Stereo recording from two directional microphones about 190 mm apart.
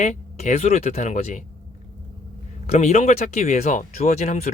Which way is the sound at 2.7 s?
35° left (ahead or behind).